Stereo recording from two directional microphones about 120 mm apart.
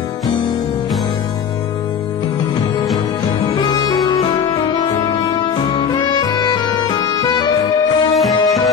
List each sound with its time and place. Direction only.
3.5 s music: 35° left (ahead or behind)
5.7 s music: 35° left (ahead or behind)
8.2 s music: centre (ahead or behind)